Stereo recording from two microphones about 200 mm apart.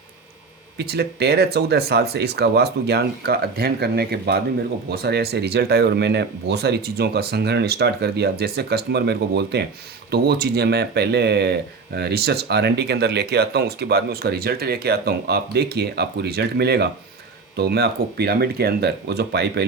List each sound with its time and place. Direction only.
0.8 s speech: 55° right (ahead or behind)